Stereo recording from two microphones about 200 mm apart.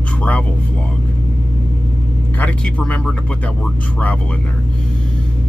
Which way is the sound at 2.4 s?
5° left (ahead or behind).